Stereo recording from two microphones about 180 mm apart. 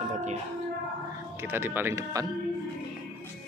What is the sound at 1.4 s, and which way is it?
Speech, 10° right (ahead or behind).